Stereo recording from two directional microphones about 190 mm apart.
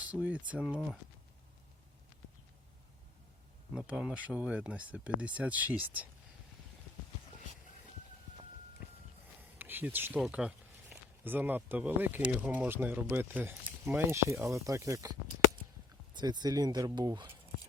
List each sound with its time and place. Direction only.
0.1 s speech: 5° right (ahead or behind)
3.8 s speech: 5° right (ahead or behind)
9.6 s speech: 10° right (ahead or behind)
16.1 s speech: 20° right (ahead or behind)